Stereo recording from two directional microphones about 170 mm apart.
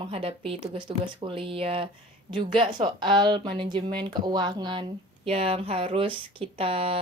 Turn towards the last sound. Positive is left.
turn(degrees=-35)  # may be behind; listen again after turning